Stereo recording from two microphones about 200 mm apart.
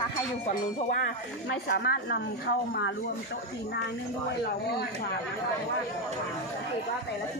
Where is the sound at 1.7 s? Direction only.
50° left (ahead or behind).